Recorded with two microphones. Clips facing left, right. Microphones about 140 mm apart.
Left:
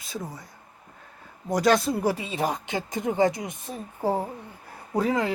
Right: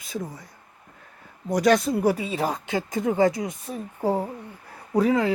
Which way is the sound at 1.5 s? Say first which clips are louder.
Right 2 dB; 30° left (ahead or behind).